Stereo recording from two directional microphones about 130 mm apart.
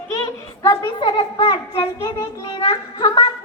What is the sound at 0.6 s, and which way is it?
Speech, 25° left (ahead or behind).